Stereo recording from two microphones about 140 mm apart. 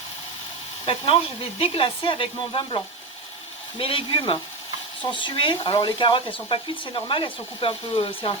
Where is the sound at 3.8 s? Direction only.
40° left (ahead or behind).